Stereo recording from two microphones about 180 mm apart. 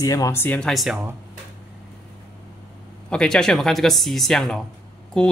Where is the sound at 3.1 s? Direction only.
5° left (ahead or behind).